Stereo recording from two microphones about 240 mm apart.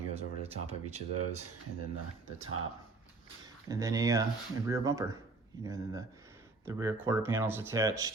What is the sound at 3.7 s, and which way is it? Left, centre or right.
Speech, centre.